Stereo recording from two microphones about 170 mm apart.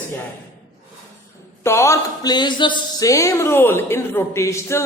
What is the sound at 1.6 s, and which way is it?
Speech, 15° left (ahead or behind).